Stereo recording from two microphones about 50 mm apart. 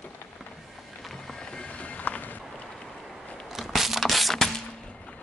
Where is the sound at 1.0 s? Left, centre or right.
Centre; by 2.4 s left.